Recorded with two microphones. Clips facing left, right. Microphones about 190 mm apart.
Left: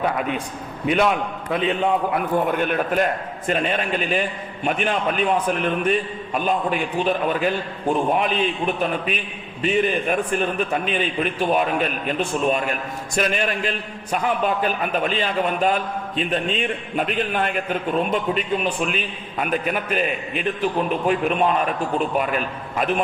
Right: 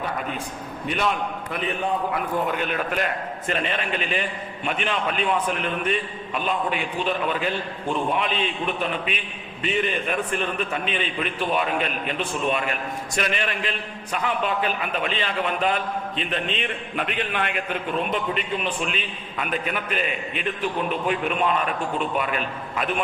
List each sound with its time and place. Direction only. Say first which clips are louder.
1.8 s a man's voice: left 4 dB; 55° left (ahead or behind)